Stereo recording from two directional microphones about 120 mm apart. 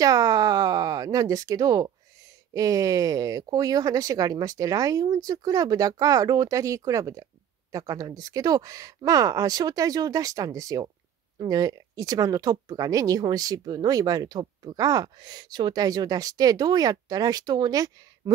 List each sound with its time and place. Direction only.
0.0 s speech: 30° right (ahead or behind)